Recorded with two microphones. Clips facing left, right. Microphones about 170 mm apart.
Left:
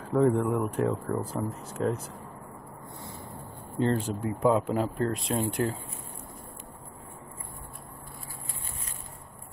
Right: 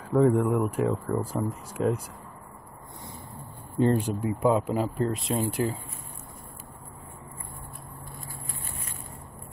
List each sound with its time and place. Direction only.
0.0 s speech: 5° right (ahead or behind)
3.8 s speech: 15° right (ahead or behind)
4.5 s speech: 5° right (ahead or behind)